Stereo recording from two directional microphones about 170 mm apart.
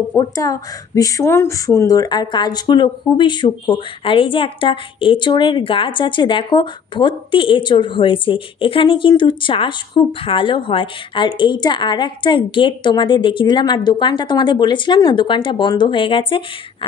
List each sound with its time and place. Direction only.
0.1 s speech: 20° left (ahead or behind)